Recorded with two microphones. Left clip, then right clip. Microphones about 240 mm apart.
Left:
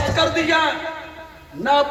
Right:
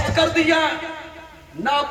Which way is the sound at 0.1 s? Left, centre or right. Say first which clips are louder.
Right 3 dB; right.